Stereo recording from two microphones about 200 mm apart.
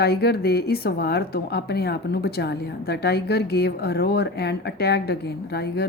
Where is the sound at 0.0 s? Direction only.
55° left (ahead or behind).